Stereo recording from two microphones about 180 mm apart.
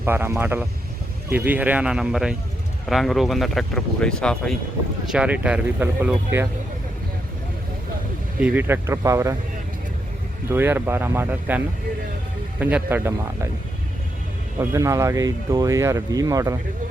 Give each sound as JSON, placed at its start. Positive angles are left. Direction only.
{"t": 0.0, "sound": "speech", "side_deg": -10}
{"t": 5.0, "sound": "speech", "side_deg": -5}
{"t": 8.4, "sound": "speech", "side_deg": -10}
{"t": 10.5, "sound": "speech", "side_deg": -10}
{"t": 14.6, "sound": "speech", "side_deg": -15}